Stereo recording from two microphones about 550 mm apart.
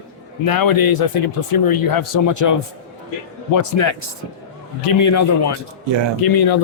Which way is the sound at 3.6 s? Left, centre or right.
Left.